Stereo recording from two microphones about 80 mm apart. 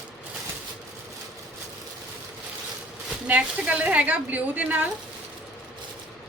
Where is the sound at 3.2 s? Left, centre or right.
Centre.